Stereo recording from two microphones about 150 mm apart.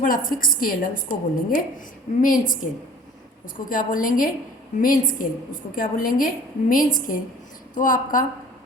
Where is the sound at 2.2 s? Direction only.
65° left (ahead or behind).